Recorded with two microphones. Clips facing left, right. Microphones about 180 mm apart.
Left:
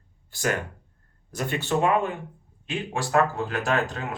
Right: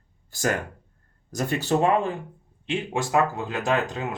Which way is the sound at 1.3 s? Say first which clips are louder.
Right 3 dB; 40° right (ahead or behind).